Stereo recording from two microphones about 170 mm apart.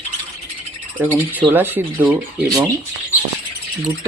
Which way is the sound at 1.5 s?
10° right (ahead or behind).